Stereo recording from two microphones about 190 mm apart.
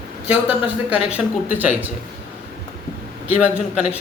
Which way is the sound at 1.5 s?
10° right (ahead or behind).